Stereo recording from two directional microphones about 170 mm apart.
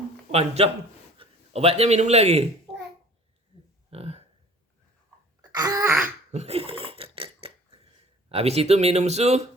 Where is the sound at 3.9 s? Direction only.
35° right (ahead or behind).